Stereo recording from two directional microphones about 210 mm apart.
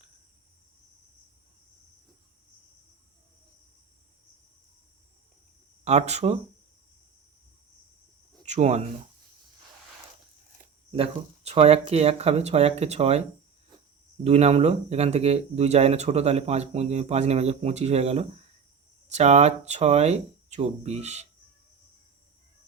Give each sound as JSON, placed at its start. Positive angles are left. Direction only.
{"t": 5.8, "sound": "speech", "side_deg": -30}
{"t": 8.4, "sound": "speech", "side_deg": -35}
{"t": 10.9, "sound": "speech", "side_deg": -30}
{"t": 14.3, "sound": "speech", "side_deg": -30}